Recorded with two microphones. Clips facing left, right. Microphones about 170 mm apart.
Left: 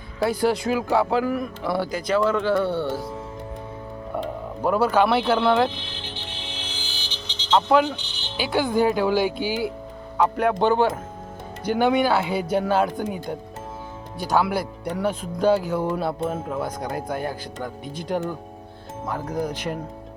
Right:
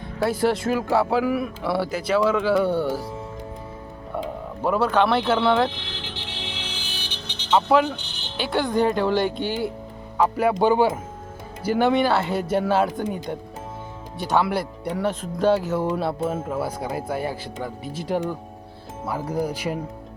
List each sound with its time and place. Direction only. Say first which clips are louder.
0.2 s speech: even; centre (ahead or behind)
4.6 s speech: left 1 dB; centre (ahead or behind)
5.8 s vehicle: right 1 dB; 90° right; by 7.5 s 60° right (ahead or behind)
7.5 s speech: even; centre (ahead or behind)
7.9 s music: even; 55° right (ahead or behind)
8.4 s speech: left 1 dB; centre (ahead or behind)